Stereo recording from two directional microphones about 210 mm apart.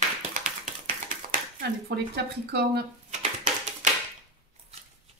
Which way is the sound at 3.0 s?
35° right (ahead or behind).